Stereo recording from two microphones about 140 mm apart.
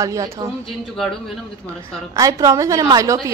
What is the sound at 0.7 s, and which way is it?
Speech, centre (ahead or behind).